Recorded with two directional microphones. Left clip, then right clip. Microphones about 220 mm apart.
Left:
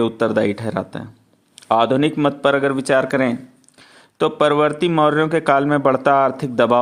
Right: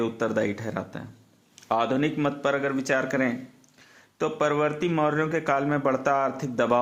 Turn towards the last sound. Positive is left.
turn(degrees=35)  # may be behind; listen again after turning